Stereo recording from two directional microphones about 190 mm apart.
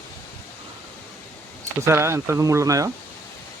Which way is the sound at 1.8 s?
15° right (ahead or behind).